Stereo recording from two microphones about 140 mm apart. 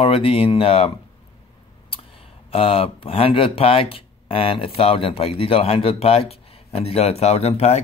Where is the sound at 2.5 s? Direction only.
40° left (ahead or behind).